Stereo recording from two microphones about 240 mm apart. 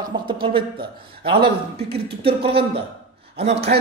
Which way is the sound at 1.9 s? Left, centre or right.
Right.